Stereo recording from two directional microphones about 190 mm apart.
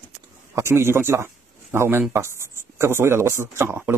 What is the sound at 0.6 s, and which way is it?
A man's voice, 15° right (ahead or behind).